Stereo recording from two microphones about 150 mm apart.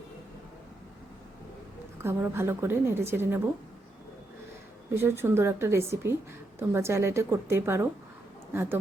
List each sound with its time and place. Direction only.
2.0 s a woman's voice: 15° right (ahead or behind)
4.9 s a woman's voice: 15° right (ahead or behind)